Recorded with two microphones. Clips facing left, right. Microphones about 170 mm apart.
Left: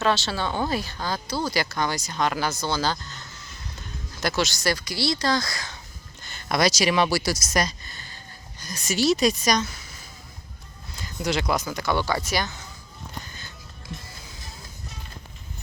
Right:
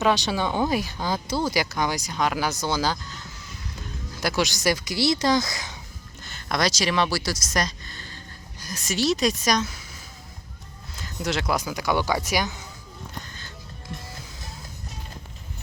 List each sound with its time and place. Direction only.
0.0 s speech: 15° right (ahead or behind)
6.2 s speech: 5° left (ahead or behind)
8.5 s a woman's voice: 5° right (ahead or behind)
13.2 s music: 10° left (ahead or behind)